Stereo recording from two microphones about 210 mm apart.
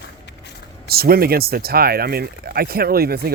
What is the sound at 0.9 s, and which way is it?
Speech, 45° right (ahead or behind).